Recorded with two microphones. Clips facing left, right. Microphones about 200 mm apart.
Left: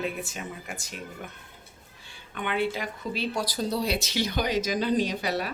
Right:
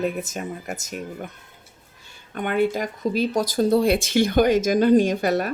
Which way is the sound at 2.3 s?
45° right (ahead or behind).